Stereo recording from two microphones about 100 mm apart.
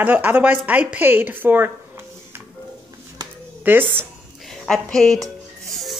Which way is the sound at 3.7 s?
20° right (ahead or behind).